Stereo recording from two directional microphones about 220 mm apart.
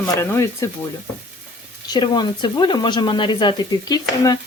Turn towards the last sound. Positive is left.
turn(degrees=15)  # may be behind; listen again after turning